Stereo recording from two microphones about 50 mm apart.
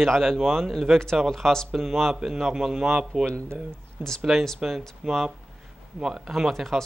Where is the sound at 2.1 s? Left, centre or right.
Centre.